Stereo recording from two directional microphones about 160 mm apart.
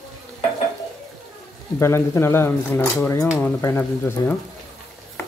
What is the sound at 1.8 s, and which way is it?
Speech, 15° left (ahead or behind).